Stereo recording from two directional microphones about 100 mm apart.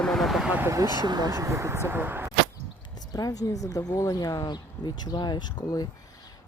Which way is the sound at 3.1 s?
35° left (ahead or behind).